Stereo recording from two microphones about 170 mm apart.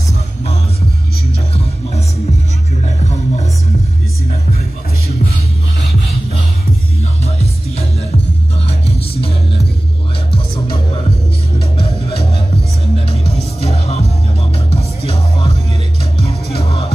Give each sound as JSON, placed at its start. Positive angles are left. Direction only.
{"t": 2.8, "sound": "music", "side_deg": 40}
{"t": 7.0, "sound": "music", "side_deg": 40}
{"t": 11.8, "sound": "music", "side_deg": 35}
{"t": 16.5, "sound": "music", "side_deg": 35}